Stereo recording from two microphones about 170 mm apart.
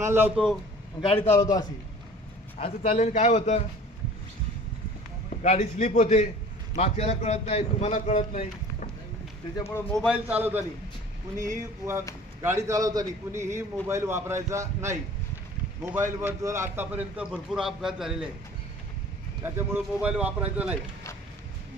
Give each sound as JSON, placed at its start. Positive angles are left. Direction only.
{"t": 0.0, "sound": "a man's voice", "side_deg": -15}
{"t": 1.0, "sound": "a man's voice", "side_deg": 30}
{"t": 1.3, "sound": "a man's voice", "side_deg": 20}
{"t": 2.6, "sound": "a man's voice", "side_deg": 35}
{"t": 5.3, "sound": "a man's voice", "side_deg": 40}
{"t": 9.6, "sound": "speech", "side_deg": 15}
{"t": 9.9, "sound": "a man's voice", "side_deg": -5}
{"t": 11.3, "sound": "a sound", "side_deg": -50}
{"t": 12.4, "sound": "a man's voice", "side_deg": -15}
{"t": 19.4, "sound": "a man's voice", "side_deg": -15}